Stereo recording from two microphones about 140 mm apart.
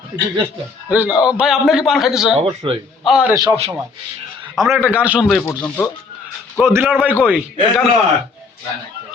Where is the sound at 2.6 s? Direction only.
35° right (ahead or behind).